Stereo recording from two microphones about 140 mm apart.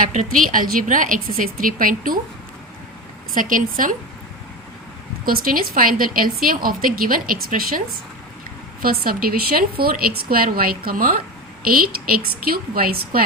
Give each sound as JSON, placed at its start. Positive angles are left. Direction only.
{"t": 0.0, "sound": "a woman's voice", "side_deg": -70}
{"t": 3.3, "sound": "a woman's voice", "side_deg": -75}
{"t": 5.2, "sound": "a woman's voice", "side_deg": -90}
{"t": 8.8, "sound": "a woman's voice", "side_deg": -90}